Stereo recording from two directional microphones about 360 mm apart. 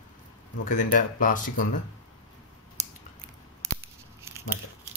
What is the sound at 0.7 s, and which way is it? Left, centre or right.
Speech, left.